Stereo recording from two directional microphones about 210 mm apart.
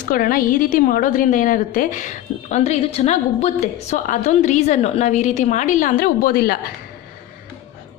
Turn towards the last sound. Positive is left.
turn(degrees=45)  # may be behind; listen again after turning